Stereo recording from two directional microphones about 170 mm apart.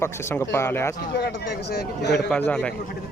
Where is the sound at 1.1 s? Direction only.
75° left (ahead or behind).